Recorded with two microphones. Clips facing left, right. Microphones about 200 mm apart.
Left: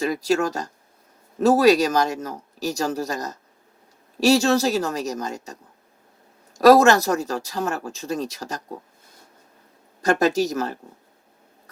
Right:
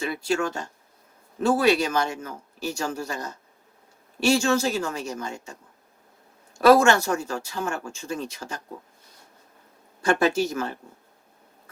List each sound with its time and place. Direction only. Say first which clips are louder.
0.0 s speech: left 4 dB; 35° left (ahead or behind)
6.6 s speech: left 3 dB; 40° left (ahead or behind)
10.0 s speech: left 2 dB; 40° left (ahead or behind)